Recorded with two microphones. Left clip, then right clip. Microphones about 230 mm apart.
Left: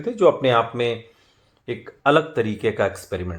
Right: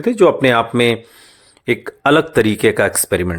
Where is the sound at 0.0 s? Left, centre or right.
Right.